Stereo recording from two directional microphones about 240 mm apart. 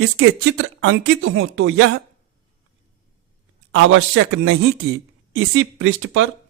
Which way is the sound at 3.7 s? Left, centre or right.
Right.